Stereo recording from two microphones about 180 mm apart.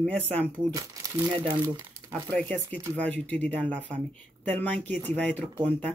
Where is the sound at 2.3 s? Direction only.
10° left (ahead or behind).